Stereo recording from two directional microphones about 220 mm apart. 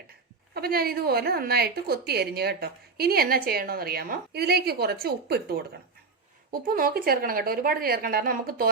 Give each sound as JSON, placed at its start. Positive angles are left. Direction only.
{"t": 0.5, "sound": "a woman's voice", "side_deg": -45}